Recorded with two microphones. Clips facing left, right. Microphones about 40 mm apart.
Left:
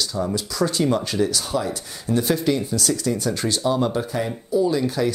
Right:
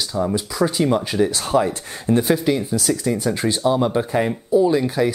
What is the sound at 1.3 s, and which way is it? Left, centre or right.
Speech, right.